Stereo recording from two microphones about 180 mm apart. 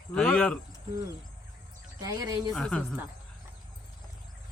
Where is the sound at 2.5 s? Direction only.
5° left (ahead or behind).